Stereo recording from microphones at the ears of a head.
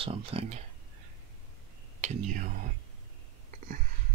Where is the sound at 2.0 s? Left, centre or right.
Right.